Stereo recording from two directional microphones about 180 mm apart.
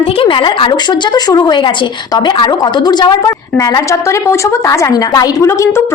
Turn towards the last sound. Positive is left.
turn(degrees=15)  # may be behind; listen again after turning